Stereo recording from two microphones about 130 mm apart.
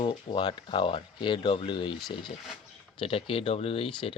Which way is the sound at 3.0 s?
45° left (ahead or behind).